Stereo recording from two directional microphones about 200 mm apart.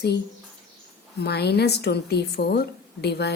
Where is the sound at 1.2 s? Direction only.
55° left (ahead or behind).